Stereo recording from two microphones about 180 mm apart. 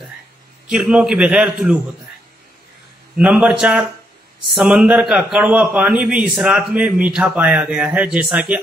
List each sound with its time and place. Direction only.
0.7 s a man's voice: 5° right (ahead or behind)
3.2 s a man's voice: 5° right (ahead or behind)